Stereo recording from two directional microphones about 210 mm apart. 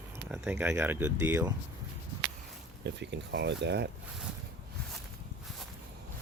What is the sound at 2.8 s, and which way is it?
Speech, 55° right (ahead or behind).